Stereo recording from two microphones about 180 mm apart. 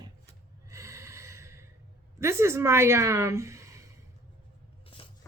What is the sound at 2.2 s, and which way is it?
A woman's voice, 15° right (ahead or behind).